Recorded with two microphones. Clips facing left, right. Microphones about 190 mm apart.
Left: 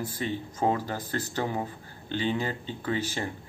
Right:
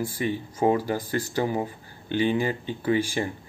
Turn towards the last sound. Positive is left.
turn(degrees=-10)  # may be behind; listen again after turning